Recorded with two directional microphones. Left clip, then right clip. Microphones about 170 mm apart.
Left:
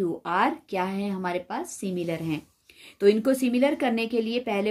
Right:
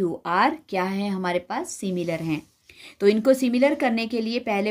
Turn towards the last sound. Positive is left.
turn(degrees=-30)  # may be behind; listen again after turning